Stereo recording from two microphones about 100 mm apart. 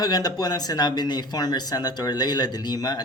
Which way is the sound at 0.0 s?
40° left (ahead or behind).